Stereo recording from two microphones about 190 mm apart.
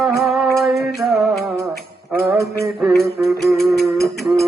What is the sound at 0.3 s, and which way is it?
Music, centre (ahead or behind).